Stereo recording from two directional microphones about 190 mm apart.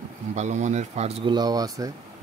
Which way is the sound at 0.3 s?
40° right (ahead or behind).